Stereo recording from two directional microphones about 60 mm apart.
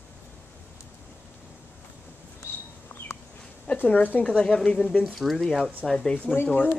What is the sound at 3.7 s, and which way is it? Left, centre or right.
Speech, left.